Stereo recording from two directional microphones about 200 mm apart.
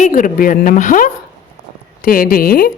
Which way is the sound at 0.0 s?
40° left (ahead or behind).